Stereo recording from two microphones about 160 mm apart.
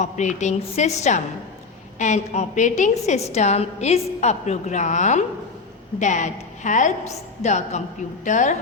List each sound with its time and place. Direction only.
0.0 s a woman's voice: 50° left (ahead or behind)